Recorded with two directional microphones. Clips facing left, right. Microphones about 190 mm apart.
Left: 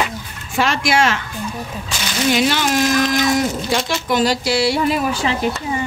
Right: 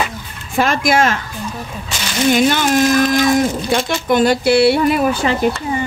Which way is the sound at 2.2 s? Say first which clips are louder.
Right 4 dB; 50° right (ahead or behind).